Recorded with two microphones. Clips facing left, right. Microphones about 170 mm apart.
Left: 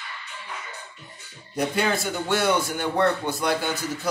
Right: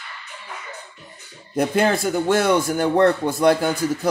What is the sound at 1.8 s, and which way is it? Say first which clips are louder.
Speech: right 8 dB; 50° right (ahead or behind).